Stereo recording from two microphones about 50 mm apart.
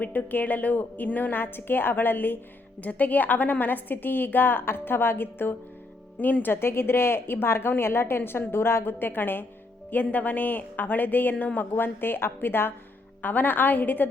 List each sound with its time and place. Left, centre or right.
0.0 s a woman's voice: left